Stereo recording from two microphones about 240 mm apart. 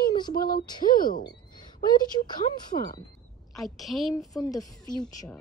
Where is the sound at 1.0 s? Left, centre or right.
Left.